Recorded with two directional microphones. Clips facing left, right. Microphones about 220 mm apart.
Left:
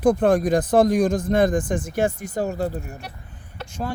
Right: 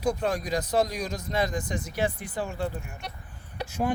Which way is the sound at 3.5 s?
15° right (ahead or behind).